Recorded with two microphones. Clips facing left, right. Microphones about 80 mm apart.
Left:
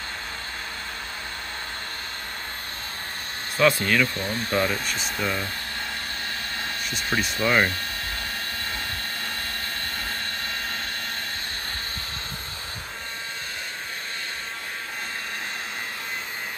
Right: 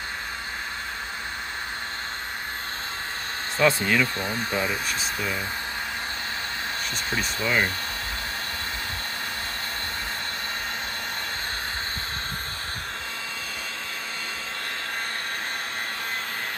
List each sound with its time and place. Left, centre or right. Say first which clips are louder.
3.5 s speech: left 1 dB; right; by 5.4 s centre
7.4 s speech: left 3 dB; left